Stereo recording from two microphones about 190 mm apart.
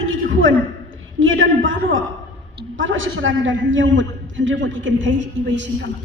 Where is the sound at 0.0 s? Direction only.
90° right.